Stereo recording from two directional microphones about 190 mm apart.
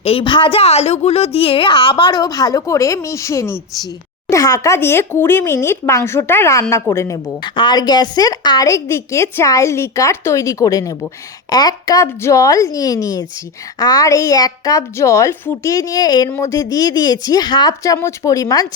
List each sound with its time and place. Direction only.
0.0 s a woman's voice: 30° left (ahead or behind)